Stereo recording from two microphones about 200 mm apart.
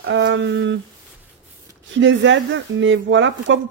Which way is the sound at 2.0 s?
65° right (ahead or behind).